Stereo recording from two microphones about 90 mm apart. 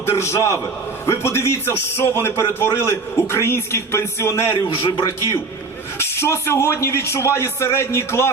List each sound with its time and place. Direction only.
0.0 s a man's voice: 30° left (ahead or behind)
4.8 s a man's voice: 60° left (ahead or behind)
6.0 s a man's voice: 30° left (ahead or behind)